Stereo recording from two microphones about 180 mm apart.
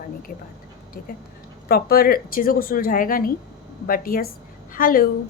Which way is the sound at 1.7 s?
55° left (ahead or behind).